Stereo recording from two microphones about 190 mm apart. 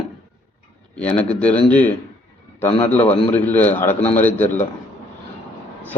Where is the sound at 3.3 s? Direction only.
10° left (ahead or behind).